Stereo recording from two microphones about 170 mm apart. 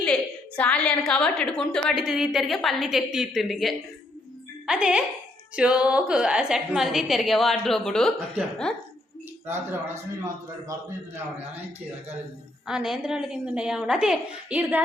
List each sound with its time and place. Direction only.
0.0 s a woman's voice: 5° left (ahead or behind)
9.5 s a man's voice: 15° right (ahead or behind)
12.6 s a woman's voice: 5° right (ahead or behind)